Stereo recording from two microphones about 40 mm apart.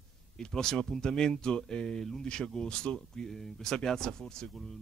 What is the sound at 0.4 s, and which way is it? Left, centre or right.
Speech, centre.